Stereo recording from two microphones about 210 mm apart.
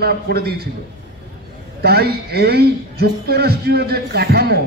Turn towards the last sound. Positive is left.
turn(degrees=-50)  # may be behind; listen again after turning